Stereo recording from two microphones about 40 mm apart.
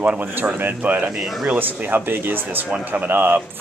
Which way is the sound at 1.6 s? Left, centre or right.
Right.